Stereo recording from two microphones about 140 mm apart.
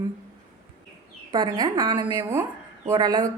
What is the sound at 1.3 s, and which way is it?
Speech, 30° right (ahead or behind).